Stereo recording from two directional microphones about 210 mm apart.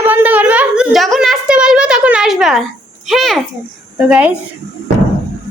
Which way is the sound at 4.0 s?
5° right (ahead or behind).